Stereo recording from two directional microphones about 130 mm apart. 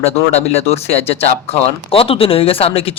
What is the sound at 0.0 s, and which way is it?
Speech, 55° left (ahead or behind).